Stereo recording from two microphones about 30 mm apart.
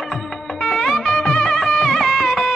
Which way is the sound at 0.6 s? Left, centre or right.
Centre.